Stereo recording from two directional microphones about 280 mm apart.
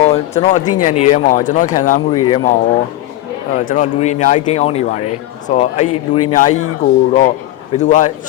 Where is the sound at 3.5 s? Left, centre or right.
Left.